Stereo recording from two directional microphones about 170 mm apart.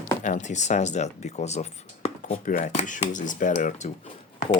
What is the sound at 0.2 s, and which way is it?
Speech, 45° left (ahead or behind).